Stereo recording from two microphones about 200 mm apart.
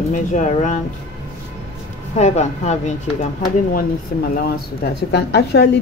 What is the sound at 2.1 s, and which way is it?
Speech, 35° left (ahead or behind).